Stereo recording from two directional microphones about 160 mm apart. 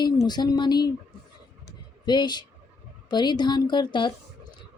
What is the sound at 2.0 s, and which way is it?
A woman's voice, 25° left (ahead or behind).